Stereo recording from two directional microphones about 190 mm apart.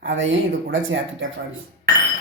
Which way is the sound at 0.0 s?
85° right.